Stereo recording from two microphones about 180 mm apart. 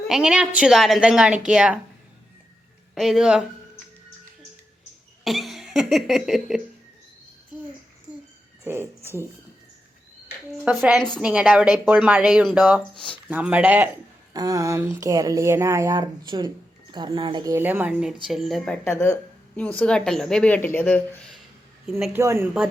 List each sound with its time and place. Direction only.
0.1 s speech: 5° right (ahead or behind)
2.9 s speech: centre (ahead or behind)
5.2 s cough: centre (ahead or behind)
8.6 s speech: 15° right (ahead or behind)
10.7 s speech: 5° right (ahead or behind)
14.3 s speech: 20° right (ahead or behind); by 21.3 s 10° left (ahead or behind)
22.1 s speech: 15° right (ahead or behind)